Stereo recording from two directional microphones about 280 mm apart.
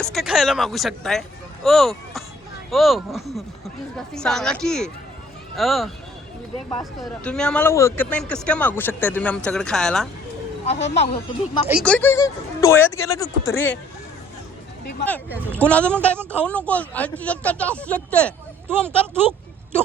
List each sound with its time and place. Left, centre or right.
0.0 s speech: centre
7.0 s speech: centre
10.7 s speech: left
11.7 s speech: centre
15.5 s speech: centre